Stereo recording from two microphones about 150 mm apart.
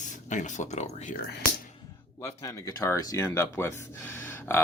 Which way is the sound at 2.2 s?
20° left (ahead or behind).